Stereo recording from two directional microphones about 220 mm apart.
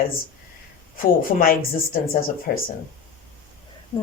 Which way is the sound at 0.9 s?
40° left (ahead or behind).